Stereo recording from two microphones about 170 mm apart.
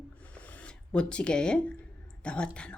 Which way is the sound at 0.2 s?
10° left (ahead or behind).